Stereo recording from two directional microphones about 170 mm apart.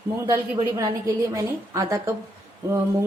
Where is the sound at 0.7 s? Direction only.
20° right (ahead or behind).